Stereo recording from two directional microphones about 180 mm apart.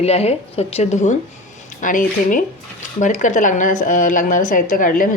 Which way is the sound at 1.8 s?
45° left (ahead or behind).